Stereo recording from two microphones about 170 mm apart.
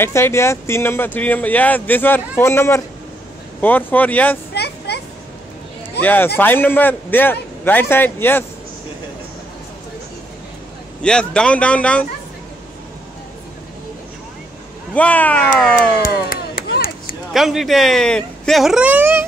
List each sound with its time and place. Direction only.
0.0 s speech: 15° left (ahead or behind)
4.6 s a sound: 75° left (ahead or behind)
6.0 s speech: 10° left (ahead or behind)
11.0 s speech: 5° left (ahead or behind)
15.0 s speech: 10° left (ahead or behind)
16.0 s a sound: 60° left (ahead or behind)
17.3 s speech: centre (ahead or behind)